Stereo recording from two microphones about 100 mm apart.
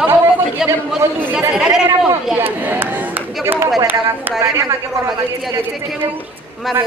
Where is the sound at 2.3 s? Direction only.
20° right (ahead or behind).